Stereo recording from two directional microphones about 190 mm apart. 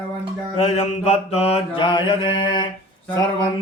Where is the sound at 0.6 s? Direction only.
35° left (ahead or behind).